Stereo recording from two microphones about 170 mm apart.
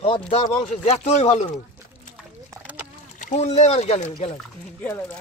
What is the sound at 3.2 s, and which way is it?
Speech, 40° left (ahead or behind).